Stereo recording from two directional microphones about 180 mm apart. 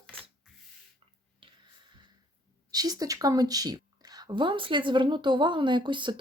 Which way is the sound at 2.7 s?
20° right (ahead or behind).